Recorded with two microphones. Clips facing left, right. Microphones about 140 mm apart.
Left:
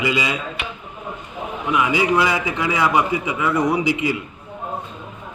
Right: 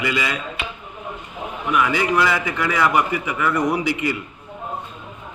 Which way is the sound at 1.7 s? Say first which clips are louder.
Left 1 dB; 15° left (ahead or behind).